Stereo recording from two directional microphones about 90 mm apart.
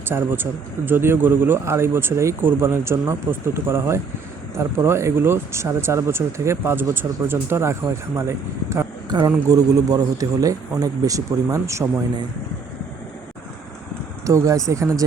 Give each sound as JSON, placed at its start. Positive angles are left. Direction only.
{"t": 0.1, "sound": "speech", "side_deg": -25}
{"t": 9.0, "sound": "a man's voice", "side_deg": -45}
{"t": 14.3, "sound": "a man's voice", "side_deg": -35}